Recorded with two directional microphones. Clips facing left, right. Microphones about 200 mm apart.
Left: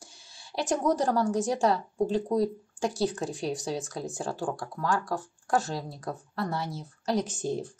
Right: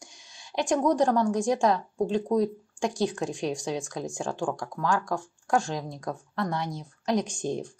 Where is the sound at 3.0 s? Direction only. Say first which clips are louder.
Right 2 dB; 15° right (ahead or behind).